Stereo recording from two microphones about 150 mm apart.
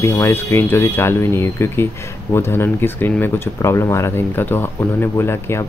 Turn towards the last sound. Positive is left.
turn(degrees=15)  # may be behind; listen again after turning